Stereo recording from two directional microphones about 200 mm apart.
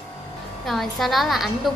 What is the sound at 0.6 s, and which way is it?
A woman's voice, centre (ahead or behind).